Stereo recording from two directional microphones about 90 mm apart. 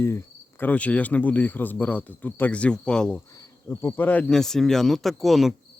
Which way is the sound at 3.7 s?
25° left (ahead or behind).